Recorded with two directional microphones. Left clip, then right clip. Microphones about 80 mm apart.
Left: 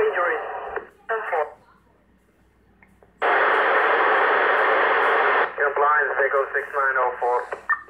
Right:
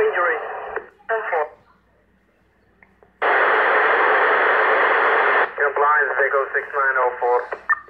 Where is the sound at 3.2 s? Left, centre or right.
Right.